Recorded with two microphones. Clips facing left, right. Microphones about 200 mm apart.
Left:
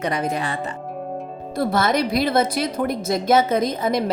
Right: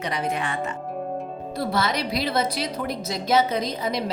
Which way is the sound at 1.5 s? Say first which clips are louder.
Left 5 dB; 50° left (ahead or behind).